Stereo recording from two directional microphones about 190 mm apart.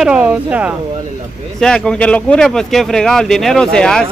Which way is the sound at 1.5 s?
5° left (ahead or behind).